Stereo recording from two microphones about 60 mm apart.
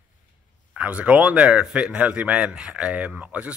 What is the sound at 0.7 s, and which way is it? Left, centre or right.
Speech, right.